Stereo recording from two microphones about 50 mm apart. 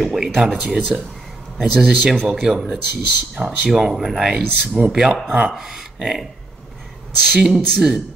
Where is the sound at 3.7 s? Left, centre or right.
Centre.